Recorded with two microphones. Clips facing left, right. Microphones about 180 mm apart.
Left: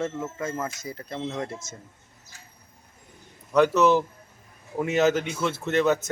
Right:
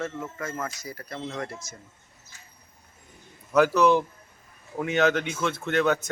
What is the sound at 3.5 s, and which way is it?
A man's voice, centre (ahead or behind).